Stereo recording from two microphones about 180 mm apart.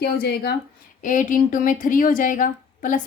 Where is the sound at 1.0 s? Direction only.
45° left (ahead or behind).